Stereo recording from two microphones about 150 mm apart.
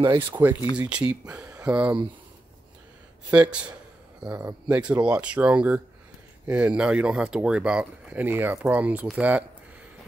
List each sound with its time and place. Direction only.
0.3 s speech: 10° right (ahead or behind)
1.2 s speech: 25° right (ahead or behind)
1.6 s speech: 10° right (ahead or behind)
3.3 s speech: 10° right (ahead or behind)